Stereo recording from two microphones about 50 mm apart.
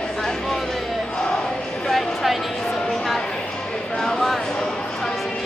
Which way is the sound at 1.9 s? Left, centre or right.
Centre.